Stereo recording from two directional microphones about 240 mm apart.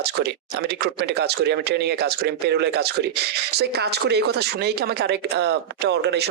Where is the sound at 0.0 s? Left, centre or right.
Right.